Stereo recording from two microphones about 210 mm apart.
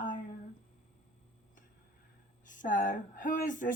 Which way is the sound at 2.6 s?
40° left (ahead or behind).